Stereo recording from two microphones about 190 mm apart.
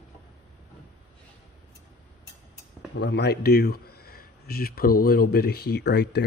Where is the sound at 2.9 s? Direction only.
65° left (ahead or behind).